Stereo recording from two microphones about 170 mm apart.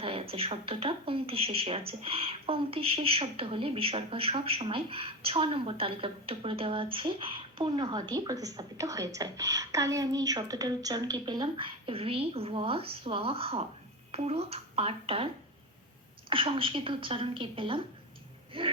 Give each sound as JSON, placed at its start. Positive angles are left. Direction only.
{"t": 0.0, "sound": "speech", "side_deg": -35}
{"t": 16.3, "sound": "speech", "side_deg": -30}